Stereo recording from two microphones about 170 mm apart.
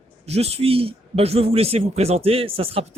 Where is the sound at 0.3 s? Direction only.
40° right (ahead or behind).